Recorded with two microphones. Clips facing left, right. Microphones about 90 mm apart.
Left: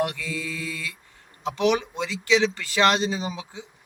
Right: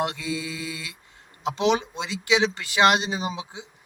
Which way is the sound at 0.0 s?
20° right (ahead or behind).